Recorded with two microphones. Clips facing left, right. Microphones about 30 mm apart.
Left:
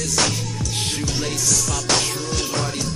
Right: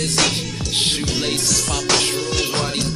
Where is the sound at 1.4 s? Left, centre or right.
Right.